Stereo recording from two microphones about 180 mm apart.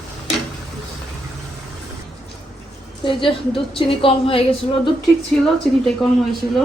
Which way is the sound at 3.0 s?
30° left (ahead or behind).